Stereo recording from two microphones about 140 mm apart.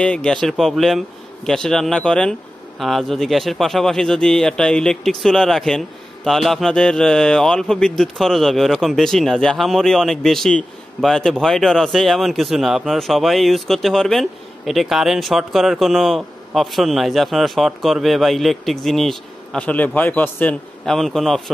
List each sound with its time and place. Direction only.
0.0 s speech: 5° left (ahead or behind)